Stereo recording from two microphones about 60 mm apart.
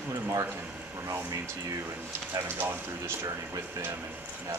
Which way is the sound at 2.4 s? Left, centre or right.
Right.